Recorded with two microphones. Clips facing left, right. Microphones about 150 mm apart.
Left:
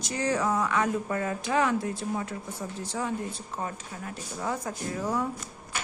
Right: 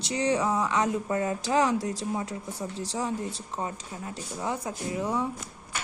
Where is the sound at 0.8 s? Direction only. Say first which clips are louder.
Right 1 dB; 20° right (ahead or behind).